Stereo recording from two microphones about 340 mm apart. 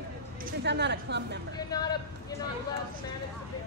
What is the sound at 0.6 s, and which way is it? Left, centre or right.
Speech, right.